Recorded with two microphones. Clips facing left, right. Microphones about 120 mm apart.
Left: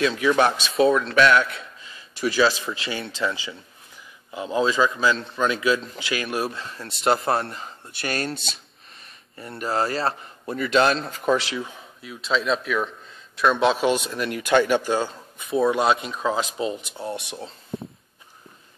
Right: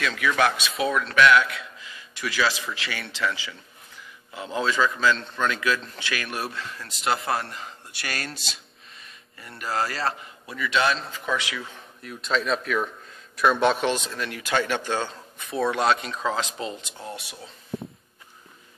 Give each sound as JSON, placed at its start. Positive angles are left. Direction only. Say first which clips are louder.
{"t": 0.0, "sound": "a man's voice", "louder": "left 4 dB", "side_deg": 25}
{"t": 5.5, "sound": "a man's voice", "louder": "left 4 dB", "side_deg": 20}
{"t": 9.4, "sound": "a man's voice", "louder": "left 3 dB", "side_deg": 30}
{"t": 10.4, "sound": "a man's voice", "louder": "left 5 dB", "side_deg": 45}
{"t": 11.6, "sound": "speech", "louder": "left 3 dB", "side_deg": 5}
{"t": 17.0, "sound": "a man's voice", "louder": "left 7 dB", "side_deg": 25}